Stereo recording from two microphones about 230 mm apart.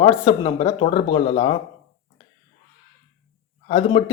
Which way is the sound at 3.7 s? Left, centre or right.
Left.